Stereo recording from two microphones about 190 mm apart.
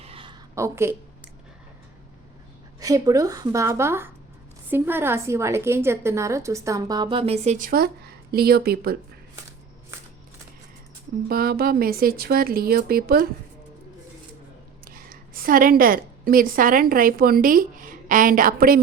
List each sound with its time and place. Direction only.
0.0 s a sound: 30° right (ahead or behind)
0.5 s a woman's voice: 15° right (ahead or behind)
2.8 s a woman's voice: 20° right (ahead or behind); by 9.0 s 55° right (ahead or behind)
11.3 s speech: 50° right (ahead or behind)
14.8 s a woman's voice: 50° right (ahead or behind)